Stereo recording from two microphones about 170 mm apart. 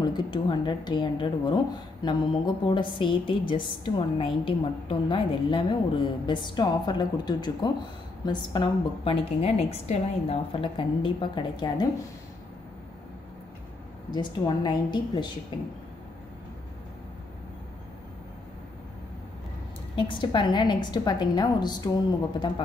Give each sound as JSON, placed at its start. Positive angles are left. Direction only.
{"t": 0.0, "sound": "a woman's voice", "side_deg": 25}
{"t": 14.1, "sound": "a woman's voice", "side_deg": 25}
{"t": 20.0, "sound": "a woman's voice", "side_deg": 30}